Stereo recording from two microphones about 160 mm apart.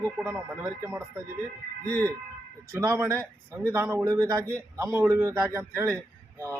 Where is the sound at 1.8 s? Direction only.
10° left (ahead or behind).